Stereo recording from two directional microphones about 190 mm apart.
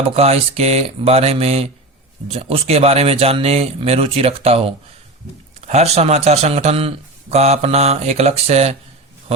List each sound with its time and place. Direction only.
0.2 s a man's voice: 35° right (ahead or behind)